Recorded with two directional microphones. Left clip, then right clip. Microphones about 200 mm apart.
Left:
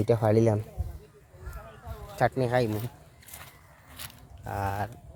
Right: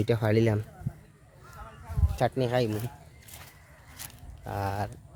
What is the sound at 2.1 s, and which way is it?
Speech, centre (ahead or behind).